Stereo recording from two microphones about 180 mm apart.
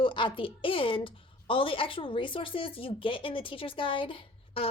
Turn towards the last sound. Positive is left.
turn(degrees=30)  # may be behind; listen again after turning